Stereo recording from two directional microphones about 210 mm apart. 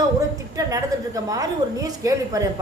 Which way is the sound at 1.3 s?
15° right (ahead or behind).